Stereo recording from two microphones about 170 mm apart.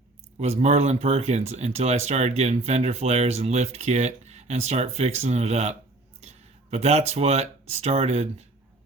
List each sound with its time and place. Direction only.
0.3 s speech: 40° right (ahead or behind)